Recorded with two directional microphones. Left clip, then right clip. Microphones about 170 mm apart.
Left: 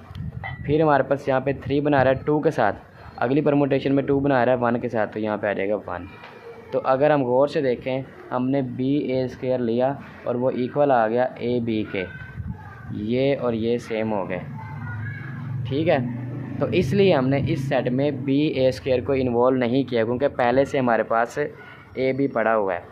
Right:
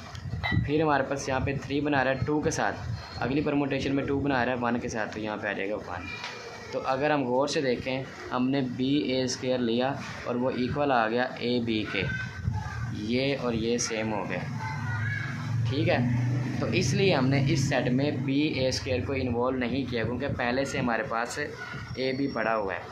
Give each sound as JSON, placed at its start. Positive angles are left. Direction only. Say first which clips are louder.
{"t": 0.7, "sound": "speech", "louder": "left 8 dB", "side_deg": 50}
{"t": 8.4, "sound": "speech", "louder": "left 5 dB", "side_deg": 30}
{"t": 15.7, "sound": "speech", "louder": "left 6 dB", "side_deg": 55}